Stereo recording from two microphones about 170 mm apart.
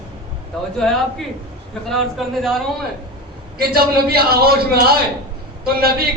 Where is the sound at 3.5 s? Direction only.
65° right (ahead or behind).